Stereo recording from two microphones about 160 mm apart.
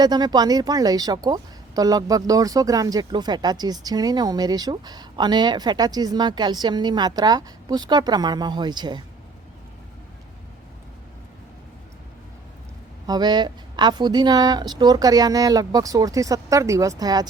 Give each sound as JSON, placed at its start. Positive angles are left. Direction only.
{"t": 0.0, "sound": "speech", "side_deg": -25}
{"t": 13.1, "sound": "speech", "side_deg": -25}